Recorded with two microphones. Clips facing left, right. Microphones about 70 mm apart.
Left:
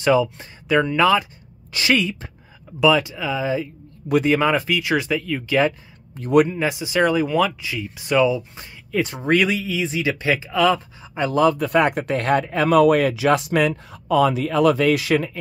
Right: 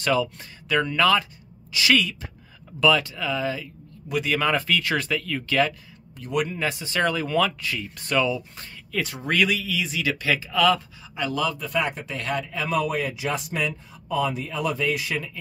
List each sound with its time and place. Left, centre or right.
0.0 s speech: centre
6.1 s speech: left
6.5 s speech: centre; by 11.5 s left
11.5 s speech: left